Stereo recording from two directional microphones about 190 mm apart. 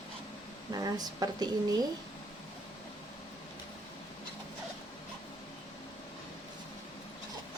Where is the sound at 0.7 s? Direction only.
20° right (ahead or behind).